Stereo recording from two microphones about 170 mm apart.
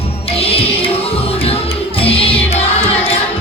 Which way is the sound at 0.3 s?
35° left (ahead or behind).